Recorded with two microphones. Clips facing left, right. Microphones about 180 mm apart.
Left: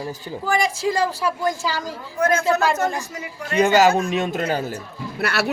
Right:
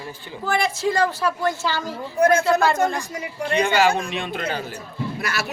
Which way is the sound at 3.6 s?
40° left (ahead or behind).